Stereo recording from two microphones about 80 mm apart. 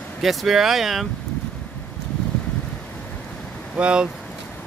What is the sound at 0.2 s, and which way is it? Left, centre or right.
Speech, centre.